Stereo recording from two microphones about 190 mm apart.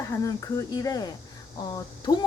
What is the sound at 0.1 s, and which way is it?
A woman's voice, 20° left (ahead or behind).